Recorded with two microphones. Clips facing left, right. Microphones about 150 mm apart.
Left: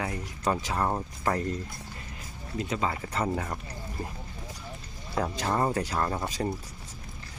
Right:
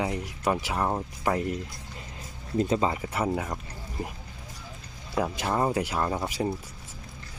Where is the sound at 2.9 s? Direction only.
10° right (ahead or behind).